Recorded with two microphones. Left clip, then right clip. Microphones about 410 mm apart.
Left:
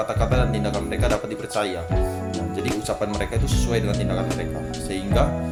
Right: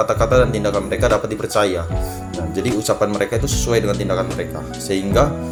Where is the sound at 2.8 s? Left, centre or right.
Left.